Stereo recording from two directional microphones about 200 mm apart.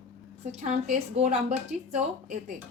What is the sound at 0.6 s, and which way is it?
A woman's voice, 35° right (ahead or behind).